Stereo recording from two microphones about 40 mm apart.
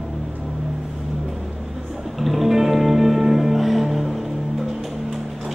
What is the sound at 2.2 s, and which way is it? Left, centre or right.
Music, centre.